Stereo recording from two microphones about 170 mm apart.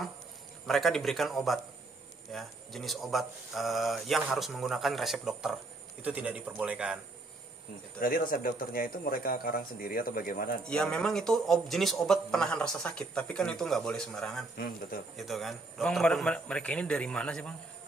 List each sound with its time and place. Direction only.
0.7 s a man's voice: centre (ahead or behind)
8.0 s speech: 55° left (ahead or behind)
10.7 s a man's voice: 5° left (ahead or behind)